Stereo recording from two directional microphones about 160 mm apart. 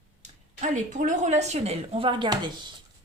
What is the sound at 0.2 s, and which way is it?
Speech, 50° right (ahead or behind).